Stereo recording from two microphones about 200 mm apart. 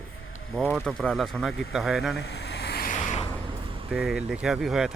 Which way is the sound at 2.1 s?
55° left (ahead or behind).